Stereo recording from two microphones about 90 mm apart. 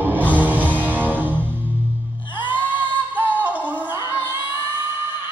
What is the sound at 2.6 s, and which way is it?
Singing, 20° right (ahead or behind).